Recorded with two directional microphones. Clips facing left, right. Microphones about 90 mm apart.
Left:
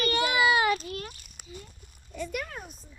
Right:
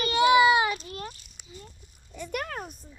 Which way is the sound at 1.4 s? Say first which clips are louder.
Left 6 dB; 50° left (ahead or behind).